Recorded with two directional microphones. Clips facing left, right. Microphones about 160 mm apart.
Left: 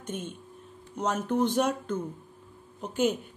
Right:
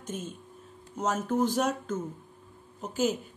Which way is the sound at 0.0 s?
Centre (ahead or behind).